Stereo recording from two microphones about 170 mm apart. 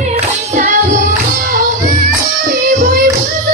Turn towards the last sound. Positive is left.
turn(degrees=-55)  # may be behind; listen again after turning